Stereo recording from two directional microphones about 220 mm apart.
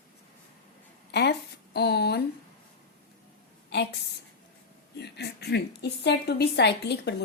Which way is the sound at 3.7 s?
50° left (ahead or behind).